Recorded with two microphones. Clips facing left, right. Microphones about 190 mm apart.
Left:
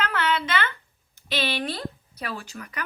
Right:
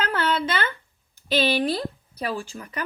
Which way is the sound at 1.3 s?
35° right (ahead or behind).